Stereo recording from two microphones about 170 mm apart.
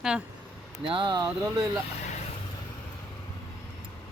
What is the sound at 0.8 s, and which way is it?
Speech, 30° right (ahead or behind).